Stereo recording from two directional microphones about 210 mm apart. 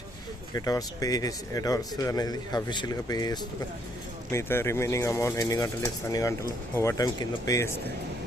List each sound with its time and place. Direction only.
0.5 s speech: 15° left (ahead or behind)